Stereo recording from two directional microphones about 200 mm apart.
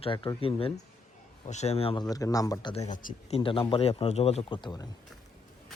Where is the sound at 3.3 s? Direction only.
25° left (ahead or behind).